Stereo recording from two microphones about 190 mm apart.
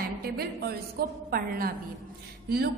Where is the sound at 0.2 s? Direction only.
55° right (ahead or behind).